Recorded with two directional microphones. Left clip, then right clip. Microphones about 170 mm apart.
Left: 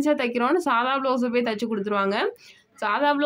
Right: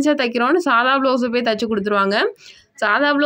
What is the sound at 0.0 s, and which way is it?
Speech, 25° right (ahead or behind).